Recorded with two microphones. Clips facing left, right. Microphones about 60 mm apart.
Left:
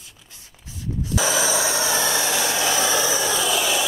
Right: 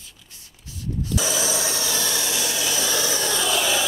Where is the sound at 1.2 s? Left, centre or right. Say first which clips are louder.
Left 5 dB; left.